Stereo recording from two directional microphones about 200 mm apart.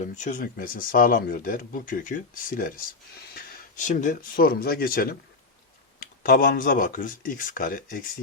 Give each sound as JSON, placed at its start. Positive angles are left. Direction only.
{"t": 0.0, "sound": "speech", "side_deg": 40}